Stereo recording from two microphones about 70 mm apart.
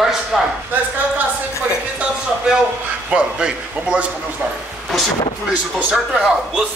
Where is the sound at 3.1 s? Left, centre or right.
Centre.